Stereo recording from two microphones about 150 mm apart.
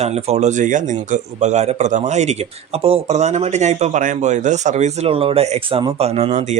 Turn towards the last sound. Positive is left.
turn(degrees=-45)  # may be behind; listen again after turning